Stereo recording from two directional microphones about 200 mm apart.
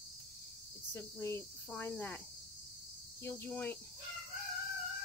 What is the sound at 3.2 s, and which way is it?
Cricket, 10° left (ahead or behind).